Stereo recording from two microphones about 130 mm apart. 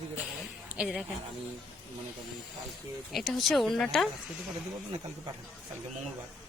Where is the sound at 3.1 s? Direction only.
Centre (ahead or behind).